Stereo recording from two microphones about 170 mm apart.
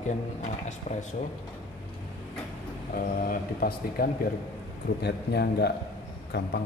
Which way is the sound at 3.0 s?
55° left (ahead or behind).